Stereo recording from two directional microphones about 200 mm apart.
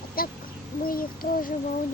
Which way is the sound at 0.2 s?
45° left (ahead or behind).